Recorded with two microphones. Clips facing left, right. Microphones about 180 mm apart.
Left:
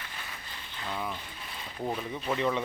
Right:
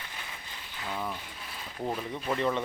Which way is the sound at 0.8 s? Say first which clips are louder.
Even; 5° right (ahead or behind).